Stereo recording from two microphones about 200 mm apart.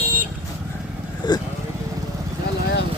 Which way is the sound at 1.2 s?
20° left (ahead or behind).